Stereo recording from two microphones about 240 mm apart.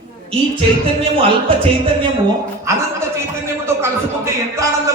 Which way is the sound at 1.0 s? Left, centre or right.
Right.